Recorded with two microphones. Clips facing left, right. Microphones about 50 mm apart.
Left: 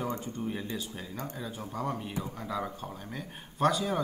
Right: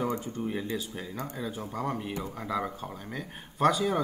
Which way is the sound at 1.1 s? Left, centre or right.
Centre.